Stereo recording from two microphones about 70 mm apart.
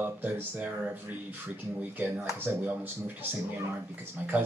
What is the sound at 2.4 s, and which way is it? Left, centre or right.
Speech, right.